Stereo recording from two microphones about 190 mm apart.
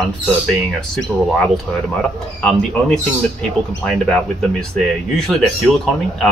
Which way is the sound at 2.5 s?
5° left (ahead or behind).